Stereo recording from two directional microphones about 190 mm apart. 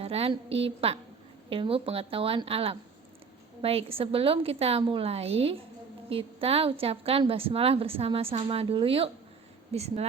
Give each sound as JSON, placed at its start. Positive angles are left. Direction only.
{"t": 0.0, "sound": "a woman's voice", "side_deg": -30}